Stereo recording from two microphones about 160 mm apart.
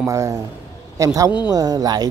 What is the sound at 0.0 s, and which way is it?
Speech, 20° right (ahead or behind).